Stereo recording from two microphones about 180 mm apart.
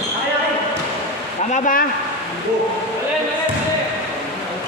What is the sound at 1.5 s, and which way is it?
Speech, 45° left (ahead or behind).